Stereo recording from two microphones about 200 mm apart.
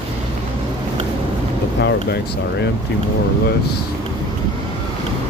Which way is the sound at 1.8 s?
60° left (ahead or behind).